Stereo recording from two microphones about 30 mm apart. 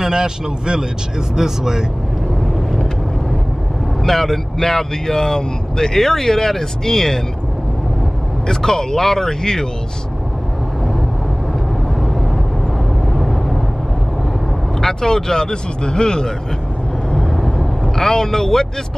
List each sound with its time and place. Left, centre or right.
0.0 s a man's voice: right
4.0 s speech: centre
8.5 s speech: centre
13.1 s vehicle: centre
14.8 s speech: centre
17.6 s a sound: centre